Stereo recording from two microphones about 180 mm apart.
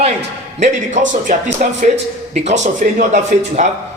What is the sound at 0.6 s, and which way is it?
A man's voice, 45° right (ahead or behind).